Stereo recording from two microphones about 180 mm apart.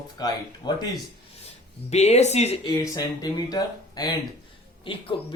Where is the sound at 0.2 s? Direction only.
20° left (ahead or behind).